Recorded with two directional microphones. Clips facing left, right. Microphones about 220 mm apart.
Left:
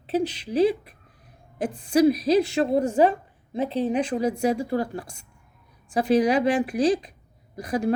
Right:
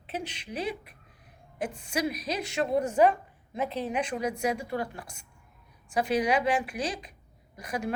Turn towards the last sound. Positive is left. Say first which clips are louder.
# left 8 dB
turn(degrees=35)  # may be behind; listen again after turning